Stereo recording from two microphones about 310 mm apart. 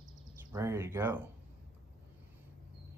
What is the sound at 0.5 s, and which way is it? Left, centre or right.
Speech, centre.